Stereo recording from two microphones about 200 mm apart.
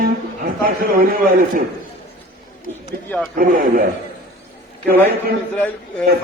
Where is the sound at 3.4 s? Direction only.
45° right (ahead or behind).